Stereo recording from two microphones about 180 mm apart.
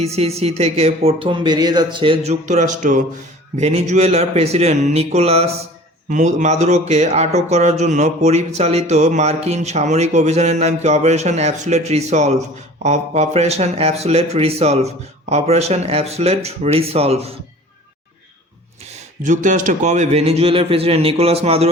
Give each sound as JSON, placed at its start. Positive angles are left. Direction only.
{"t": 0.0, "sound": "speech", "side_deg": -35}
{"t": 2.3, "sound": "speech", "side_deg": -40}
{"t": 18.9, "sound": "speech", "side_deg": -45}